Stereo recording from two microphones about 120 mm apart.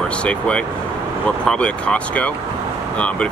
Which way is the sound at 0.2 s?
10° left (ahead or behind).